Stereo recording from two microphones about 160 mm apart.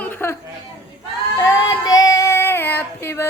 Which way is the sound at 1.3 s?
25° left (ahead or behind).